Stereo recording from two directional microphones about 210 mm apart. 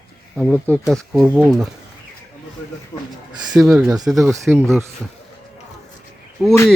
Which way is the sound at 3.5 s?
5° right (ahead or behind).